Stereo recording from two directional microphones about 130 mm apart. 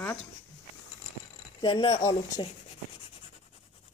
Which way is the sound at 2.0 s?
25° left (ahead or behind).